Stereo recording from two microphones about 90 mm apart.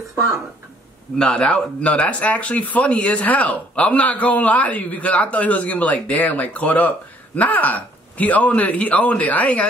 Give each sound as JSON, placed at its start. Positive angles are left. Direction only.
{"t": 1.1, "sound": "speech", "side_deg": 10}